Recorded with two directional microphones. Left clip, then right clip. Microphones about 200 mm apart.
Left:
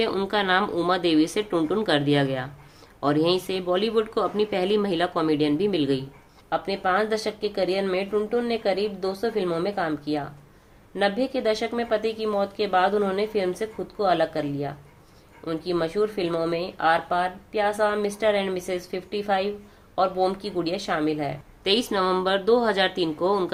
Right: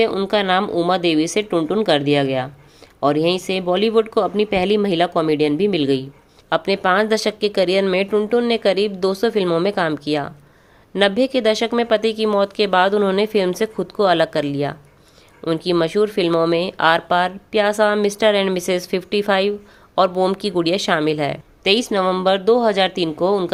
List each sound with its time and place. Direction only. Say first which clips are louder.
0.0 s speech: right 6 dB; 25° right (ahead or behind)
6.5 s speech: right 7 dB; 45° right (ahead or behind)
21.6 s speech: right 6 dB; 30° right (ahead or behind)